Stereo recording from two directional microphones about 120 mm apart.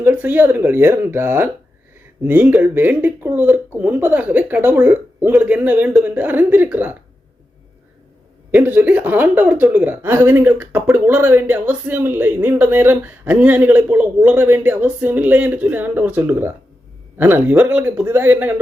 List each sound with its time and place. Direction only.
0.0 s speech: 15° right (ahead or behind)
8.5 s speech: 15° right (ahead or behind)